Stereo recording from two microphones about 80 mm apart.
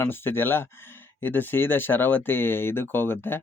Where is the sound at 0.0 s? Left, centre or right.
Left.